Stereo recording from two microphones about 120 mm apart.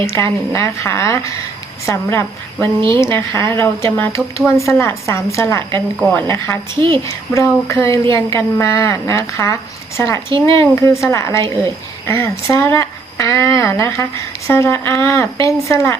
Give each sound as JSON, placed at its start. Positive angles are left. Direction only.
{"t": 0.1, "sound": "speech", "side_deg": 25}